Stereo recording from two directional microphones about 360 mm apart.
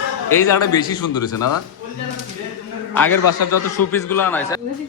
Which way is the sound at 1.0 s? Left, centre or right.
Left.